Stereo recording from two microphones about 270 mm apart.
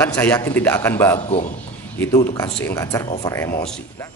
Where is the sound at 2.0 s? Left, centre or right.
Centre.